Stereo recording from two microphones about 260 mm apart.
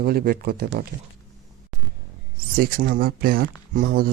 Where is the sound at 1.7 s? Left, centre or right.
Centre.